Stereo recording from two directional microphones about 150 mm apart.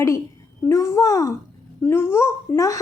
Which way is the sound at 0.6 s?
20° left (ahead or behind).